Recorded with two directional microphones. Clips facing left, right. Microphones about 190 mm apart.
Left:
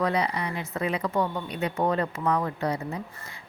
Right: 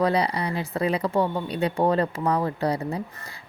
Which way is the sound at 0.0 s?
35° right (ahead or behind).